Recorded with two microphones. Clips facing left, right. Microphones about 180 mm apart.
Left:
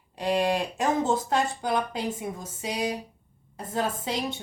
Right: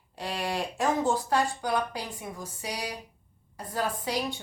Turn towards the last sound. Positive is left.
turn(degrees=25)  # may be behind; listen again after turning